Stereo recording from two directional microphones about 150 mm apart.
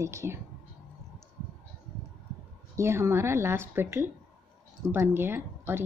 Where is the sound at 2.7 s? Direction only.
20° right (ahead or behind).